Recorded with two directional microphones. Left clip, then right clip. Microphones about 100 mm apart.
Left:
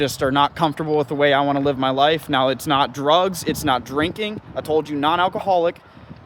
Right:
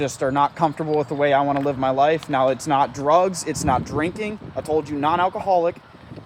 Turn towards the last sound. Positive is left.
turn(degrees=75)  # may be behind; listen again after turning